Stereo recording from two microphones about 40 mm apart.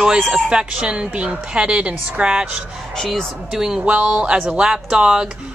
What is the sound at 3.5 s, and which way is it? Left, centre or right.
Speech, centre.